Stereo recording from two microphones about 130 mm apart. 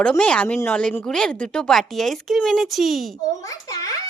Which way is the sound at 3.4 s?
25° left (ahead or behind).